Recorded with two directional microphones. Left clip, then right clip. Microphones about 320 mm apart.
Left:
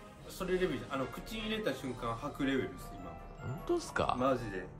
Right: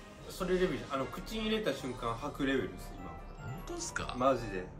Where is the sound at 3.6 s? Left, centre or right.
Centre.